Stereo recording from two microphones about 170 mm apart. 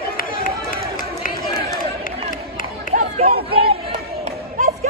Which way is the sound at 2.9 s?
35° right (ahead or behind).